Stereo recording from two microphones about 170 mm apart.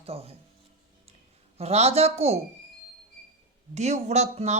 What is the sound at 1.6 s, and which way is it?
Speech, 35° right (ahead or behind).